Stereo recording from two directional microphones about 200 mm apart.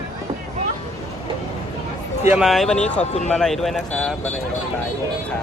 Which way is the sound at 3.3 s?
Centre (ahead or behind).